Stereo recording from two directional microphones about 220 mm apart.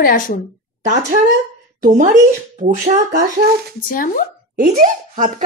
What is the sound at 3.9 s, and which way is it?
Speech, 40° left (ahead or behind).